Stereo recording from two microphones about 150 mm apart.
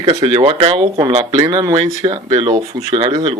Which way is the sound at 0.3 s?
35° right (ahead or behind).